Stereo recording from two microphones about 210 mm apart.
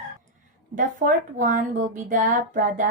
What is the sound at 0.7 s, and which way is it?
A woman's voice, 40° right (ahead or behind).